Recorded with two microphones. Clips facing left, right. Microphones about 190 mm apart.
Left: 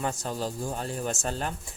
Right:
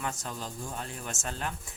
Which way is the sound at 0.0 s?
35° left (ahead or behind).